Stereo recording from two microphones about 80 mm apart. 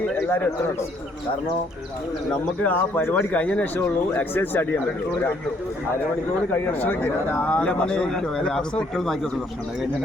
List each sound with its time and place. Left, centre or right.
0.2 s a sound: left
2.6 s speech: left
6.7 s a man's voice: left; by 9.1 s centre